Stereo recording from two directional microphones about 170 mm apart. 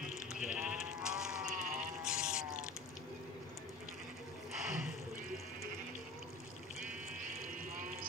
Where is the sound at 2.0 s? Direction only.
5° right (ahead or behind).